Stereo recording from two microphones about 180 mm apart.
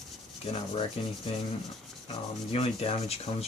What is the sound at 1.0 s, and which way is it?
Speech, 35° left (ahead or behind).